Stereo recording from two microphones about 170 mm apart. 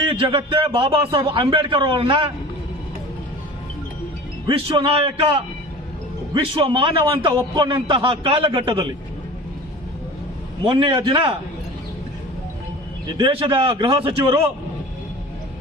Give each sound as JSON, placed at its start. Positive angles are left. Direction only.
{"t": 0.0, "sound": "a man's voice", "side_deg": -30}
{"t": 4.4, "sound": "a man's voice", "side_deg": -30}
{"t": 10.7, "sound": "a man's voice", "side_deg": -30}
{"t": 13.1, "sound": "a man's voice", "side_deg": -30}